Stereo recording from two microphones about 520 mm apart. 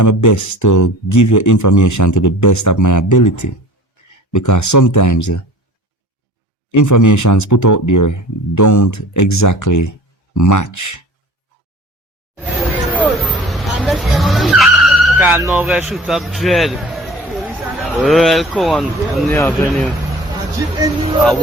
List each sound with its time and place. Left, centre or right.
0.0 s speech: left
6.7 s speech: left
12.9 s vehicle: centre
20.7 s speech: centre